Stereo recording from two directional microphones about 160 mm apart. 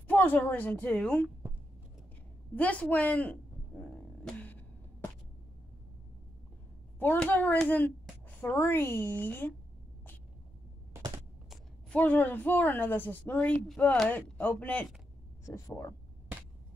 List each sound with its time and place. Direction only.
0.0 s speech: 10° left (ahead or behind)
2.5 s speech: 10° left (ahead or behind)
4.2 s a sound: 5° left (ahead or behind)
7.0 s speech: 10° left (ahead or behind)
11.5 s speech: 10° left (ahead or behind)